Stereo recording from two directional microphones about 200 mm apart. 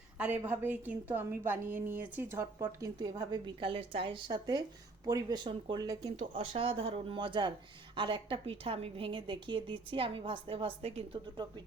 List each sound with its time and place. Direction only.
0.2 s a woman's voice: 10° right (ahead or behind); by 11.6 s 25° right (ahead or behind)